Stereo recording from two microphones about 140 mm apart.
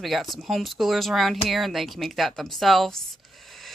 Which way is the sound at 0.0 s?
Centre (ahead or behind).